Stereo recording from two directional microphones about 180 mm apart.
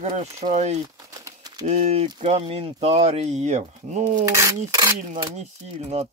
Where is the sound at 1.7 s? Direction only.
35° right (ahead or behind).